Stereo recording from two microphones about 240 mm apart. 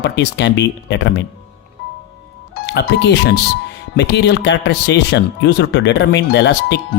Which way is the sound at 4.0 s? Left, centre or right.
Left.